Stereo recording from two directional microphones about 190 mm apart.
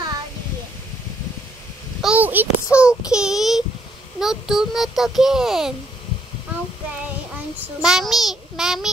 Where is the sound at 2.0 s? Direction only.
5° right (ahead or behind).